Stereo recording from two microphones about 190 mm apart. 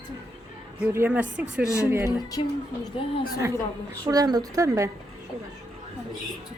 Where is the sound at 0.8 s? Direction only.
10° right (ahead or behind).